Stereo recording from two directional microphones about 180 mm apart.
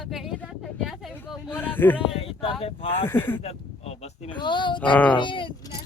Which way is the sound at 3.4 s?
35° left (ahead or behind).